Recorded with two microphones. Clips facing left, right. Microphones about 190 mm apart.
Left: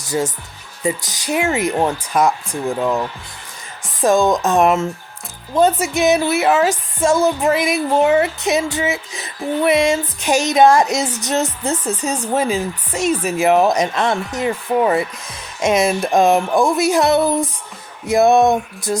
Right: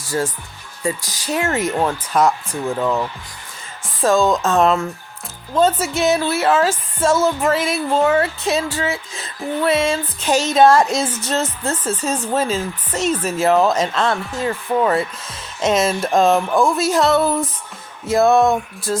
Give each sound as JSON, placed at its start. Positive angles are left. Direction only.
{"t": 0.0, "sound": "speech", "side_deg": 15}
{"t": 0.8, "sound": "music", "side_deg": 20}